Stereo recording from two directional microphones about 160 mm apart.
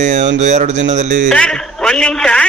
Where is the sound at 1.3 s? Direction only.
5° left (ahead or behind).